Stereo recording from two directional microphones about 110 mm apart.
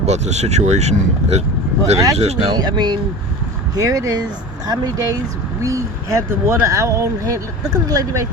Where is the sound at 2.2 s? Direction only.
70° right (ahead or behind).